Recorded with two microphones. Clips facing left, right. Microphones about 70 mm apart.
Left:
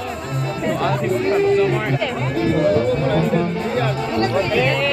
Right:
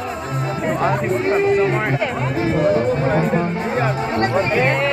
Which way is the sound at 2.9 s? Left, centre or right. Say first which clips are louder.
Even; right.